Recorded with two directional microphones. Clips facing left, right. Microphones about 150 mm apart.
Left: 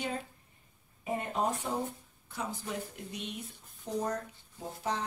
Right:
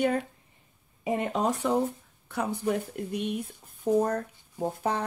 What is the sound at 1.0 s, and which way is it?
Speech, 90° right.